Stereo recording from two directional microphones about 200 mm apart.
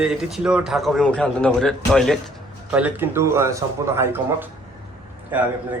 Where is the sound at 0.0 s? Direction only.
Centre (ahead or behind).